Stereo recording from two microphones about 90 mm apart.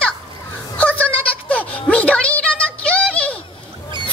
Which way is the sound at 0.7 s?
15° left (ahead or behind).